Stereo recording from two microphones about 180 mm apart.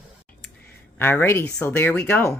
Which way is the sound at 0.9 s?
10° left (ahead or behind).